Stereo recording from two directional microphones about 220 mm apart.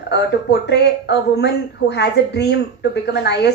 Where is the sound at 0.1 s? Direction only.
50° left (ahead or behind).